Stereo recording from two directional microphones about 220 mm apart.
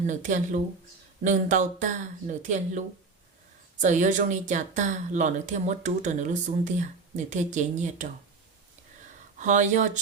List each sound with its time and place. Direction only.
0.1 s a woman's voice: 35° right (ahead or behind)
9.4 s a woman's voice: 35° right (ahead or behind)